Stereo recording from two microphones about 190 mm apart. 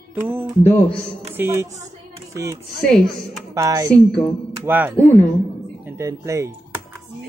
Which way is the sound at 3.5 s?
15° right (ahead or behind).